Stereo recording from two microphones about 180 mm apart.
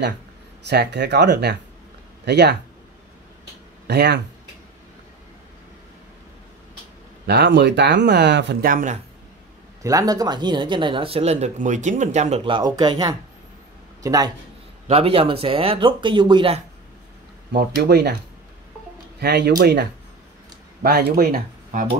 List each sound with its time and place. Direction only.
0.7 s speech: 70° right (ahead or behind)
3.8 s speech: 65° right (ahead or behind)
7.2 s speech: 70° right (ahead or behind); by 9.0 s 45° right (ahead or behind)
9.8 s speech: 20° right (ahead or behind)
14.9 s speech: 30° right (ahead or behind)
17.5 s speech: 65° right (ahead or behind)
19.1 s speech: 65° right (ahead or behind)